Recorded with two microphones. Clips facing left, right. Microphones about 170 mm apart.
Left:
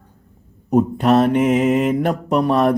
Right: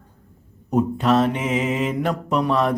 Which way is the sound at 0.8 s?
55° left (ahead or behind).